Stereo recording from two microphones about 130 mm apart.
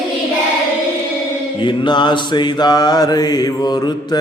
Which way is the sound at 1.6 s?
35° left (ahead or behind).